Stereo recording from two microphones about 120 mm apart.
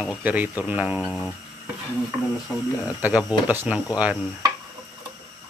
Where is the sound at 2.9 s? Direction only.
15° right (ahead or behind).